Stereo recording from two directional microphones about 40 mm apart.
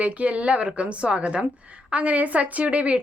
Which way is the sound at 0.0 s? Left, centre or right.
Right.